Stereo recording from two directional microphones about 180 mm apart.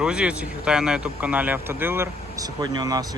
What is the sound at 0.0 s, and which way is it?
Speech, 5° right (ahead or behind).